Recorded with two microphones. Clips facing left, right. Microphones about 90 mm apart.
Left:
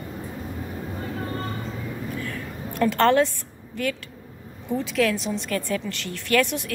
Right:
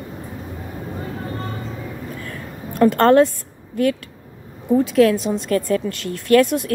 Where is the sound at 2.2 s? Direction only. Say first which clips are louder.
Right 1 dB; 35° right (ahead or behind).